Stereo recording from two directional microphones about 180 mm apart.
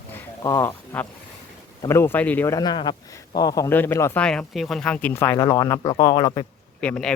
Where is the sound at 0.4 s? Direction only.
15° left (ahead or behind).